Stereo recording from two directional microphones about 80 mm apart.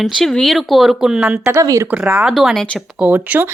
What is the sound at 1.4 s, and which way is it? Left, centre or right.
Speech, right.